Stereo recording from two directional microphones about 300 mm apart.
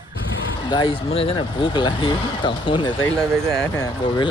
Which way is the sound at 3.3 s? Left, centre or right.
Centre.